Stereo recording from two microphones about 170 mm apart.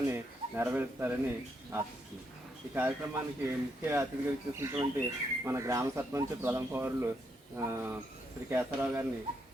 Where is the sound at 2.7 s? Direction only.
10° right (ahead or behind).